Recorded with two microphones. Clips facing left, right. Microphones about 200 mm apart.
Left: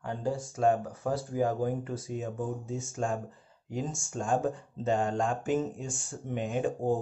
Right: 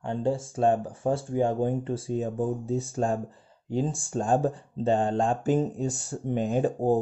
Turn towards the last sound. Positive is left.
turn(degrees=-35)  # may be behind; listen again after turning